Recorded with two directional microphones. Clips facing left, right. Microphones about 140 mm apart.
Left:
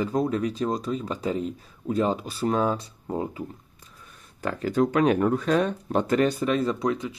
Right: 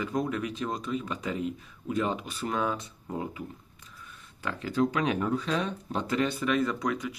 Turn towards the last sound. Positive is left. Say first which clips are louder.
# left 4 dB
turn(degrees=25)  # may be behind; listen again after turning